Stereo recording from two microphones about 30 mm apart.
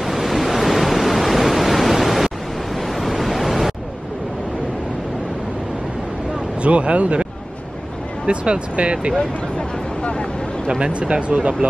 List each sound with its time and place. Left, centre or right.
0.0 s waves: centre
6.6 s speech: right
8.3 s speech: right
10.8 s speech: right